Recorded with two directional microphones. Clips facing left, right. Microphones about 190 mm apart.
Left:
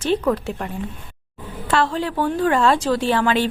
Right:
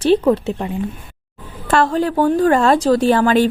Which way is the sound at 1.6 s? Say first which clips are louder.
Right 5 dB; 45° right (ahead or behind).